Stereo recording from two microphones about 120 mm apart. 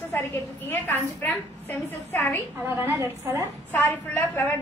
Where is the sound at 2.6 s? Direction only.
20° right (ahead or behind).